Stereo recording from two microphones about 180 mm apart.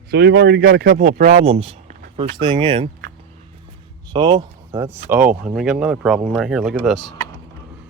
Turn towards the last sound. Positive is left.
turn(degrees=0)  # may be behind; listen again after turning